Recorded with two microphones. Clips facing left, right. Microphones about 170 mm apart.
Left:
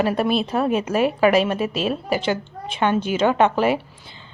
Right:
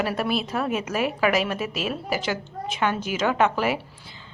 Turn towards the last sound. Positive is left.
turn(degrees=30)  # may be behind; listen again after turning